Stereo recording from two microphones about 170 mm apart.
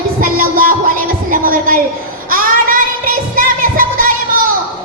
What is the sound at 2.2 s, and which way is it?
Child singing, 55° right (ahead or behind).